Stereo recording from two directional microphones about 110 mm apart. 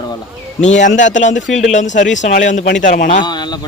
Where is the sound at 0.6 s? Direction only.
90° left.